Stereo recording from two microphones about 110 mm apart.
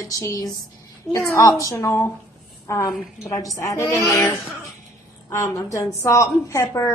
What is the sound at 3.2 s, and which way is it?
A woman's voice, 30° left (ahead or behind).